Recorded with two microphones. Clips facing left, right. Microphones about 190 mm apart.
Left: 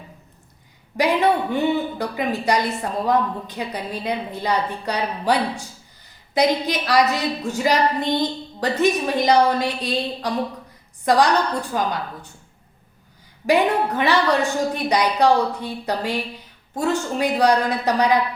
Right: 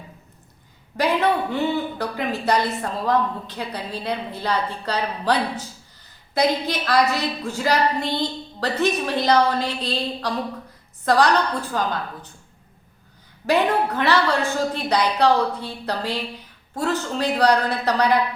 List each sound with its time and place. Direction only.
0.9 s a woman's voice: 15° left (ahead or behind)
13.5 s a woman's voice: 15° left (ahead or behind)